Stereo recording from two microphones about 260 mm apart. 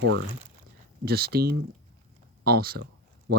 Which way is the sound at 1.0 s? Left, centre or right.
Right.